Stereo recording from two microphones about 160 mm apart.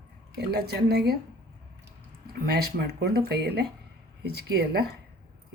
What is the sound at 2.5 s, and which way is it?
Speech, 85° right.